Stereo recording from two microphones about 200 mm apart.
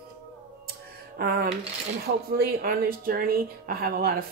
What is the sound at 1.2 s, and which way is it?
Speech, 50° right (ahead or behind).